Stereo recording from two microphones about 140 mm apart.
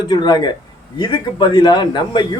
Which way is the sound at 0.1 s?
30° left (ahead or behind).